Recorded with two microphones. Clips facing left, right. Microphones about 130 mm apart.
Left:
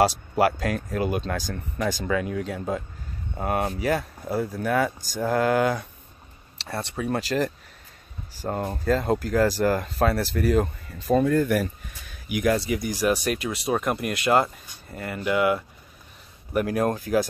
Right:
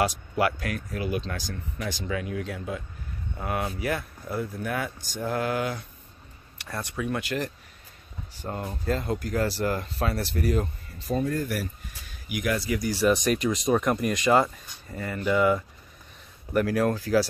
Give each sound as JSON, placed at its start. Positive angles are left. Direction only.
{"t": 0.4, "sound": "speech", "side_deg": 30}
{"t": 2.3, "sound": "speech", "side_deg": 35}
{"t": 6.6, "sound": "speech", "side_deg": 30}
{"t": 11.1, "sound": "speech", "side_deg": 75}
{"t": 12.5, "sound": "speech", "side_deg": 20}
{"t": 16.5, "sound": "speech", "side_deg": 20}